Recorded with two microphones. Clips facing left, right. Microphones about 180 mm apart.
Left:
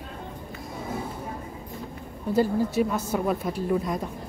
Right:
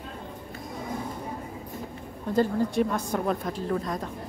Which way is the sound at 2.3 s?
5° left (ahead or behind).